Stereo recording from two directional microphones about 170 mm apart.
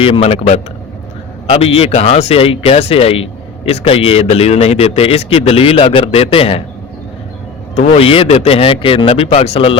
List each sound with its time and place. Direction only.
0.0 s a man's voice: 35° left (ahead or behind)
7.8 s a man's voice: 35° left (ahead or behind)